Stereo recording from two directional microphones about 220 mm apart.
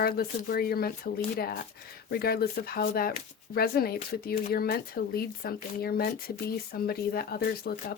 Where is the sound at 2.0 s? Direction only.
45° left (ahead or behind).